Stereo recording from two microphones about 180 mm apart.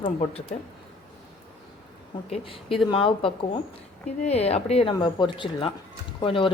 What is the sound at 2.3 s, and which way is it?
Speech, 30° left (ahead or behind).